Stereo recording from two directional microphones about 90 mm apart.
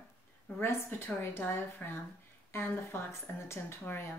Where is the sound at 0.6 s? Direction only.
25° left (ahead or behind).